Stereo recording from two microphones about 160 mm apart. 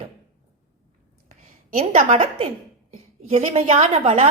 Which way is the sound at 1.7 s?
40° right (ahead or behind).